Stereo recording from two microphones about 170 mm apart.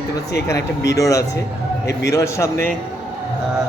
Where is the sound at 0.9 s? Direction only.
20° left (ahead or behind).